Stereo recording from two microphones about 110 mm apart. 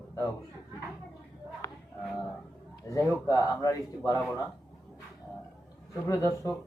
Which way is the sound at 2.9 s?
30° left (ahead or behind).